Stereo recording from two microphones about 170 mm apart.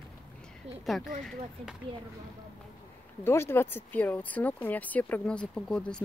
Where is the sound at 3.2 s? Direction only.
15° left (ahead or behind).